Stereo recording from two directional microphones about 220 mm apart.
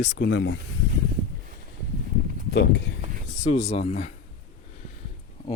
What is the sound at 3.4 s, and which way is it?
Speech, 30° left (ahead or behind).